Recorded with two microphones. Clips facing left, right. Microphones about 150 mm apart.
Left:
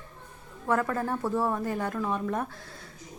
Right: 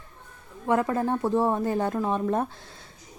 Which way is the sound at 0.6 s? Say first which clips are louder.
Right 3 dB; 20° right (ahead or behind).